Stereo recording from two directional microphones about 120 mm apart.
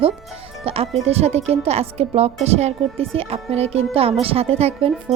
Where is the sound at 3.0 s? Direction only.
55° right (ahead or behind).